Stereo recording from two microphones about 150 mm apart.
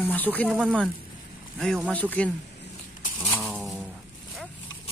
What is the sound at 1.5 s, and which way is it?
Speech, centre (ahead or behind).